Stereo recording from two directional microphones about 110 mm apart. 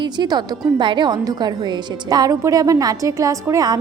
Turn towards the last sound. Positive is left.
turn(degrees=-35)  # may be behind; listen again after turning